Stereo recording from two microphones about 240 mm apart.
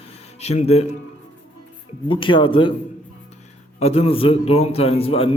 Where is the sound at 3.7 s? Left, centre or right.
Left.